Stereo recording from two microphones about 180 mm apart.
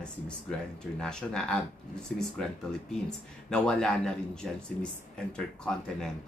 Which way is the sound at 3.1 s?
5° left (ahead or behind).